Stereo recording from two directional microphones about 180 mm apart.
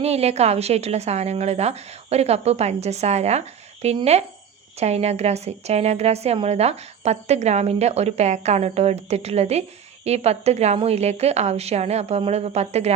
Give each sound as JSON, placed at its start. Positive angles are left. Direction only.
{"t": 0.0, "sound": "a woman's voice", "side_deg": -35}